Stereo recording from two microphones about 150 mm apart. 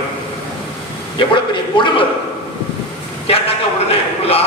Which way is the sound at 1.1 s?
30° left (ahead or behind).